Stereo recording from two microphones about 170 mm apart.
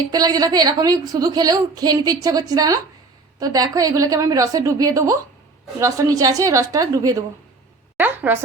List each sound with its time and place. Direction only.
0.1 s a woman's voice: 25° right (ahead or behind)